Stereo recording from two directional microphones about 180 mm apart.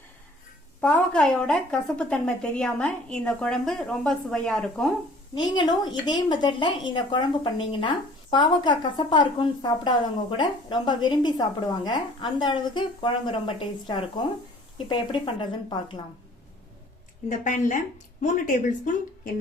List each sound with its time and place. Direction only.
0.8 s a woman's voice: 5° left (ahead or behind)
5.3 s a woman's voice: 25° left (ahead or behind)
17.2 s a woman's voice: 45° left (ahead or behind)